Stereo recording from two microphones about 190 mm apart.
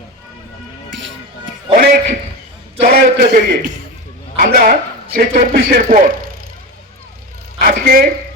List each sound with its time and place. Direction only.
1.7 s music: 50° right (ahead or behind)
2.8 s a man's voice: 50° right (ahead or behind)
4.4 s speech: 50° right (ahead or behind)
7.6 s a sound: 50° right (ahead or behind)